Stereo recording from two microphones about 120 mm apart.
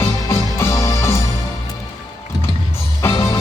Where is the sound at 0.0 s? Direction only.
20° left (ahead or behind).